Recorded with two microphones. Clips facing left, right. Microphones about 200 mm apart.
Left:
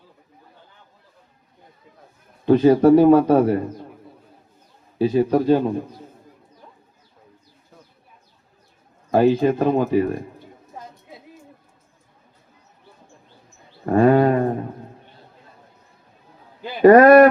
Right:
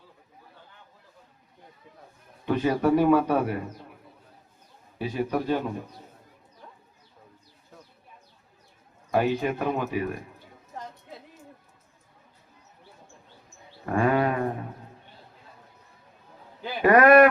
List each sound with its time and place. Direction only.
2.5 s speech: 30° left (ahead or behind)
4.9 s speech: 35° left (ahead or behind)
9.1 s speech: 35° left (ahead or behind)
13.8 s a sound: 35° left (ahead or behind)
16.8 s speech: 35° left (ahead or behind)